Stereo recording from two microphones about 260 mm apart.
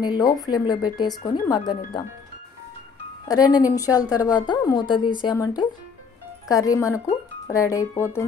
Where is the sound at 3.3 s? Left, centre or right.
Centre.